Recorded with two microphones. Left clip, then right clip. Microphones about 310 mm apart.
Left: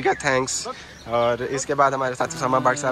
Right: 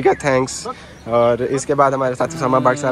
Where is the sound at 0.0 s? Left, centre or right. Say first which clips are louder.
Right 5 dB; centre.